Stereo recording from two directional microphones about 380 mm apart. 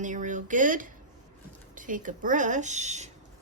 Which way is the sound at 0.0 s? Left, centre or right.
Centre.